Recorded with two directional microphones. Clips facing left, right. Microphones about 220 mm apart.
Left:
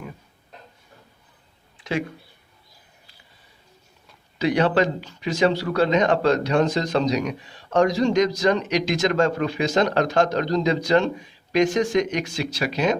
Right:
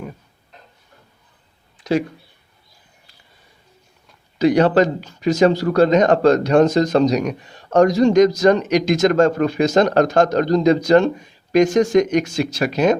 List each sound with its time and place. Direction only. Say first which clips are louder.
1.8 s speech: right 7 dB; 40° right (ahead or behind)
4.4 s speech: right 6 dB; 40° right (ahead or behind)